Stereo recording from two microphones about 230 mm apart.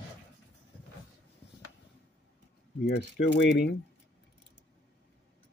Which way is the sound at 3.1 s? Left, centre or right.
Left.